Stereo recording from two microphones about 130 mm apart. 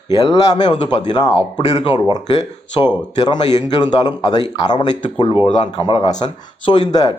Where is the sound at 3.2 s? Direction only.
30° left (ahead or behind).